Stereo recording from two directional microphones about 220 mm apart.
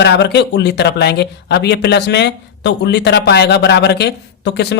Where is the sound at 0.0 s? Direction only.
50° left (ahead or behind).